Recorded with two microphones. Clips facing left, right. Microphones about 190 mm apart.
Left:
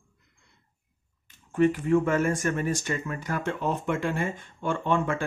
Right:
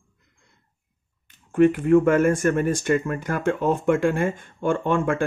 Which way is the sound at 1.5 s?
55° right (ahead or behind).